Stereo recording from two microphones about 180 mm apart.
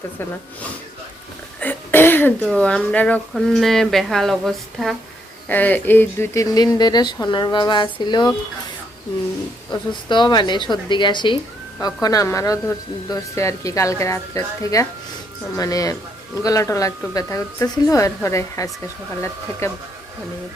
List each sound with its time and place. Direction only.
1.6 s speech: 10° left (ahead or behind)
9.9 s speech: 25° left (ahead or behind)